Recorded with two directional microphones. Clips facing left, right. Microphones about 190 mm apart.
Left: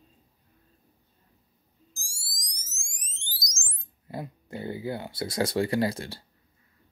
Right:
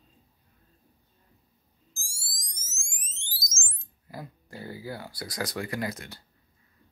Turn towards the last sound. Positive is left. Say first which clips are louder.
# left 6 dB
turn(degrees=30)  # may be behind; listen again after turning